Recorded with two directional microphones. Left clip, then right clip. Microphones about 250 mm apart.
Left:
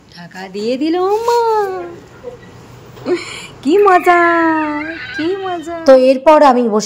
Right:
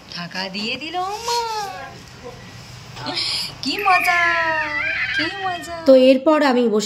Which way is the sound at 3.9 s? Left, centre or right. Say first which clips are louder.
Left 2 dB; left.